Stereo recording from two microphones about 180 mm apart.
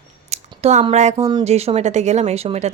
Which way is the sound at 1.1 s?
20° right (ahead or behind).